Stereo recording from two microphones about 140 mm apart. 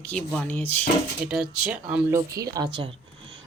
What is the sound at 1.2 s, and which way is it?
Speech, 5° right (ahead or behind).